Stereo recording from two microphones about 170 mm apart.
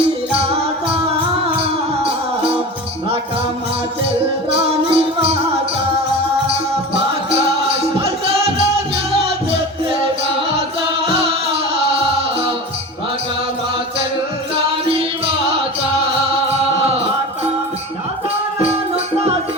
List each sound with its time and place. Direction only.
4.5 s music: 35° right (ahead or behind)
7.8 s music: 35° right (ahead or behind)